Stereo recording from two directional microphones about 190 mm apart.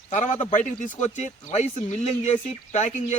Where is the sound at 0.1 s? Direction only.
40° left (ahead or behind).